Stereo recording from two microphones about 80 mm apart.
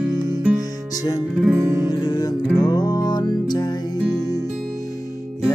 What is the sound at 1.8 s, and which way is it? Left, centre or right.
Music, left.